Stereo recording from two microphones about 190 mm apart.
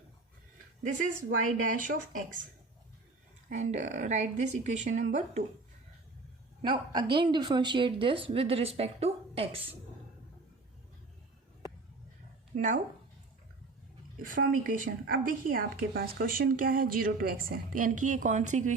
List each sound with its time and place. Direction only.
0.8 s a woman's voice: 40° right (ahead or behind)
3.5 s speech: 40° right (ahead or behind)
6.6 s a woman's voice: 25° right (ahead or behind)
12.5 s a woman's voice: 45° right (ahead or behind)
14.2 s a woman's voice: 45° right (ahead or behind)